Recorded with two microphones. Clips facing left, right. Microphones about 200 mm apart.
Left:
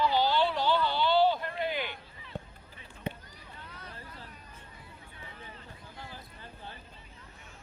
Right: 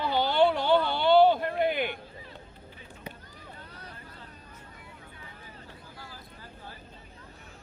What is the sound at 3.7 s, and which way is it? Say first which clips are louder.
Vehicle: right 1 dB; 35° right (ahead or behind).